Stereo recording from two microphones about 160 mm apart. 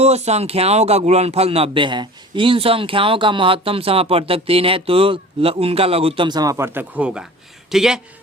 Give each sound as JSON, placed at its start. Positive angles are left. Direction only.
{"t": 0.0, "sound": "speech", "side_deg": -40}